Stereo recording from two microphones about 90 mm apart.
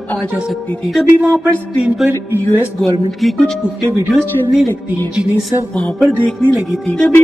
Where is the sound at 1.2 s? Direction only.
15° right (ahead or behind).